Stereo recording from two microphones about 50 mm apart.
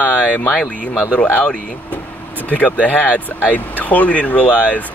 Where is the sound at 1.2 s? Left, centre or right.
Left.